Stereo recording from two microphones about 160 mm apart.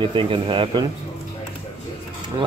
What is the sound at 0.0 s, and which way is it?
Speech, 30° right (ahead or behind).